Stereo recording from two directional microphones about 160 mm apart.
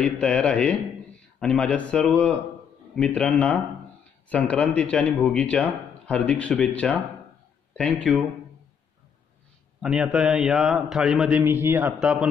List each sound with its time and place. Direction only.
0.0 s a man's voice: 5° left (ahead or behind)
9.8 s a man's voice: 5° right (ahead or behind)